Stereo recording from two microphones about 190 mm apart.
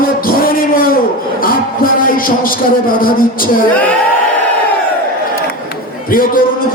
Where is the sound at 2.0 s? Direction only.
45° left (ahead or behind).